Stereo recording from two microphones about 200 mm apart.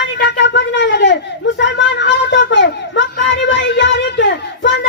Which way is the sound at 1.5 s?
60° left (ahead or behind).